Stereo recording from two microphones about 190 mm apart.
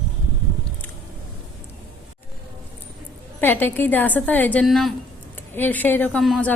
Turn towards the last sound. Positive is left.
turn(degrees=5)  # may be behind; listen again after turning